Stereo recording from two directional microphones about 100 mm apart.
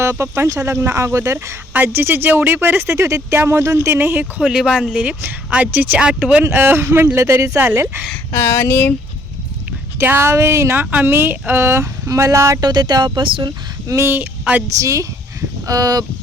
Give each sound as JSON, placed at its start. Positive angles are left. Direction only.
{"t": 0.0, "sound": "speech", "side_deg": -25}
{"t": 4.4, "sound": "speech", "side_deg": -5}
{"t": 6.4, "sound": "speech", "side_deg": -20}
{"t": 7.6, "sound": "speech", "side_deg": -20}
{"t": 8.3, "sound": "speech", "side_deg": 25}
{"t": 10.0, "sound": "speech", "side_deg": -20}
{"t": 12.6, "sound": "speech", "side_deg": -45}
{"t": 13.8, "sound": "speech", "side_deg": -25}
{"t": 14.8, "sound": "a sound", "side_deg": -35}